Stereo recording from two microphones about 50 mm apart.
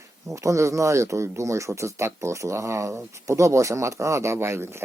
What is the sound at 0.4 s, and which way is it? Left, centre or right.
Speech, right.